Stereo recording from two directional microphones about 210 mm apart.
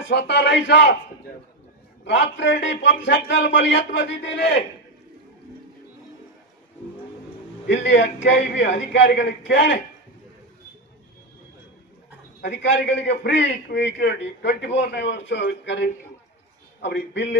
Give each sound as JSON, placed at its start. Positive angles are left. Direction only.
{"t": 0.1, "sound": "a man's voice", "side_deg": 55}
{"t": 2.0, "sound": "a man's voice", "side_deg": 55}
{"t": 7.6, "sound": "a man's voice", "side_deg": 60}
{"t": 12.4, "sound": "a man's voice", "side_deg": 55}